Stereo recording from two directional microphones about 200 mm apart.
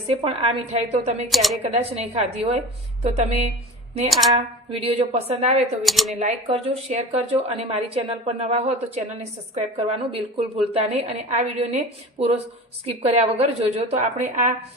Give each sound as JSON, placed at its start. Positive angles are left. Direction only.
{"t": 0.3, "sound": "a woman's voice", "side_deg": -30}
{"t": 1.3, "sound": "speech", "side_deg": 0}
{"t": 1.6, "sound": "a woman's voice", "side_deg": -30}
{"t": 5.8, "sound": "speech", "side_deg": 0}
{"t": 6.1, "sound": "a woman's voice", "side_deg": -30}
{"t": 12.8, "sound": "a woman's voice", "side_deg": -30}